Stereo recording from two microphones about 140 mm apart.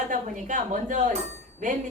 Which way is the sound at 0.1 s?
65° right (ahead or behind).